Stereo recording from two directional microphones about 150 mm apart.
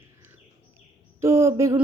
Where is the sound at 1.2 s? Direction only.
15° right (ahead or behind).